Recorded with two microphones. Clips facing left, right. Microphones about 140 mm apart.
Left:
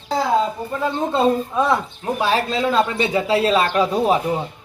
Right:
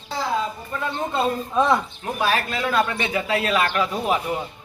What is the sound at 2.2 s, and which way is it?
A man's voice, 25° left (ahead or behind).